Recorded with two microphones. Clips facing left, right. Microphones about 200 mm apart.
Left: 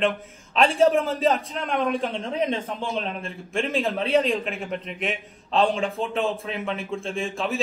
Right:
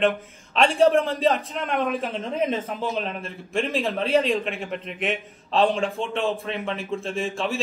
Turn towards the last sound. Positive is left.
turn(degrees=0)  # may be behind; listen again after turning